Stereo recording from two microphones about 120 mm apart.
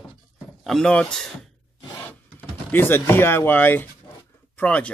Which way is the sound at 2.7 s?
20° left (ahead or behind).